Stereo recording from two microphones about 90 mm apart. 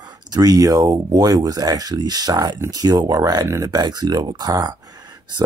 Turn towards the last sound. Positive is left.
turn(degrees=-45)  # may be behind; listen again after turning